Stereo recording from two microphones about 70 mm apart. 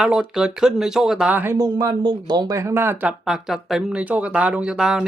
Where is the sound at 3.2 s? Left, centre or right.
Centre.